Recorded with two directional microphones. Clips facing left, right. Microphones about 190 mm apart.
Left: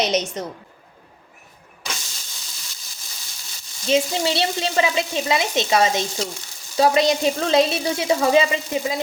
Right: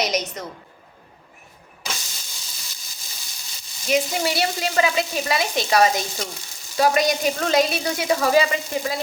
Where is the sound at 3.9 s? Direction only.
25° left (ahead or behind).